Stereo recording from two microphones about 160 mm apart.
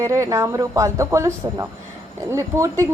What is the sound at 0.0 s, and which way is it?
A woman's voice, 20° right (ahead or behind).